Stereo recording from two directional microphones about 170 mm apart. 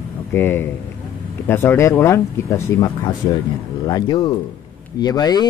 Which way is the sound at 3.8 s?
25° left (ahead or behind).